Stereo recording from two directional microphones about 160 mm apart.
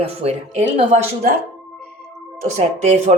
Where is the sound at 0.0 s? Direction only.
40° right (ahead or behind).